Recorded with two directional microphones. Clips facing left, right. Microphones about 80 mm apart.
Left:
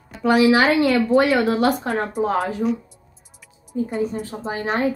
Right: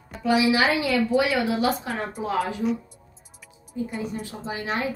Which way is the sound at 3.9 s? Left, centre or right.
Left.